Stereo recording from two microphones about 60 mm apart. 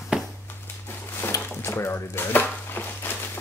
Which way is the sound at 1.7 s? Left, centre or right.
Left.